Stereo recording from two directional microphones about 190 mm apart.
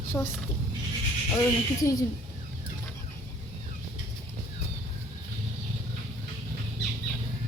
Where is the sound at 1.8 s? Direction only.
15° left (ahead or behind).